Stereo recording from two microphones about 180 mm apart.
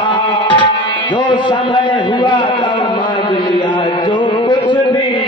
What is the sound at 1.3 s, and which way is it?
A man's voice, 25° left (ahead or behind).